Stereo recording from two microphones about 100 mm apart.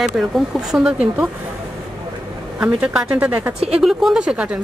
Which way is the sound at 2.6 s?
10° right (ahead or behind).